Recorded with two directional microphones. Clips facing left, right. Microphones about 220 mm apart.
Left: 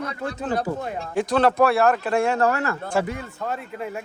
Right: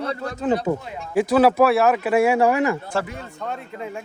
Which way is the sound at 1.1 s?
5° right (ahead or behind).